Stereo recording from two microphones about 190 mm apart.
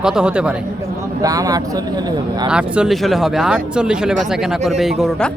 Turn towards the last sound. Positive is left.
turn(degrees=0)  # may be behind; listen again after turning